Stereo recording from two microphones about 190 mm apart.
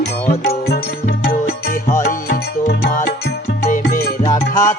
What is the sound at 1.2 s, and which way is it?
Music, 45° left (ahead or behind).